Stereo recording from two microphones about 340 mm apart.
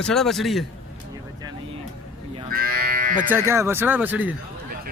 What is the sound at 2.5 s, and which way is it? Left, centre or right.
Livestock, right.